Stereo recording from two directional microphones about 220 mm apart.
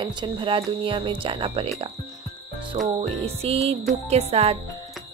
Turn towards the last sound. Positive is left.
turn(degrees=-30)  # may be behind; listen again after turning